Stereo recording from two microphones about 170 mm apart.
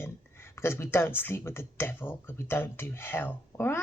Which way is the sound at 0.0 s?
15° left (ahead or behind).